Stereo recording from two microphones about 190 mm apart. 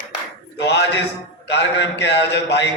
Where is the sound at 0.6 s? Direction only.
65° left (ahead or behind).